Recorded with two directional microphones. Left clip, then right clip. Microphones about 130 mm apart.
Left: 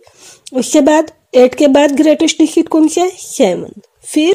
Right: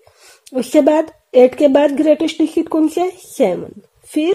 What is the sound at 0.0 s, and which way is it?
A woman's voice, 30° left (ahead or behind).